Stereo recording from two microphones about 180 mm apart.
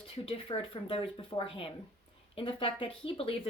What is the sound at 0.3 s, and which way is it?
Speech, 30° left (ahead or behind).